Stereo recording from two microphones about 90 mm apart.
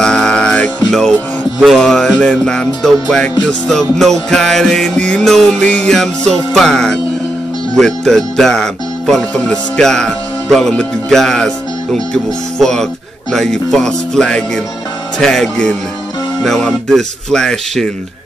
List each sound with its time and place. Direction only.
0.0 s music: 10° left (ahead or behind)
7.7 s speech: 5° left (ahead or behind)
13.3 s music: 5° left (ahead or behind)
15.1 s speech: 5° left (ahead or behind)